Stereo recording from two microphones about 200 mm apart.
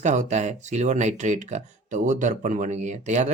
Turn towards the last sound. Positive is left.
turn(degrees=-35)  # may be behind; listen again after turning